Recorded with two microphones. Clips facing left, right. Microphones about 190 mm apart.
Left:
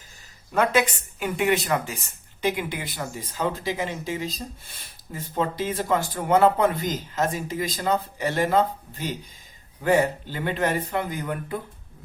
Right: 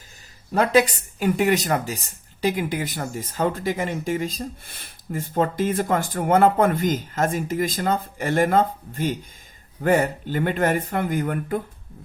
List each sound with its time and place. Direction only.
0.5 s speech: 35° right (ahead or behind); by 11.6 s 50° right (ahead or behind)